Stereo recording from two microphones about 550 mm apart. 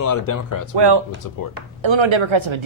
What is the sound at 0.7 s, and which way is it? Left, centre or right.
Speech, right.